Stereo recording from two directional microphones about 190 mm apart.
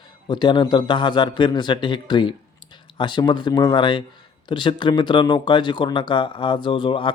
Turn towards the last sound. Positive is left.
turn(degrees=25)  # may be behind; listen again after turning